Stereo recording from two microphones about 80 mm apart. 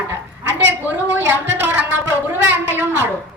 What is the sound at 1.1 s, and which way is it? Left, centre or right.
Speech, right.